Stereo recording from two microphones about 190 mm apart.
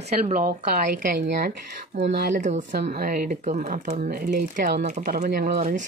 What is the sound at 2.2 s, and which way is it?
Speech, 40° right (ahead or behind).